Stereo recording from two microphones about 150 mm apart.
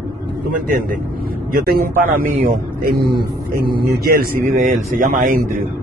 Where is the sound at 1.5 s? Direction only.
85° right; by 2.9 s 70° right (ahead or behind).